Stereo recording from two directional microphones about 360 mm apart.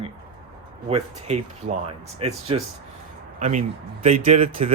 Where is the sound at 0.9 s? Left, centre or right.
Centre.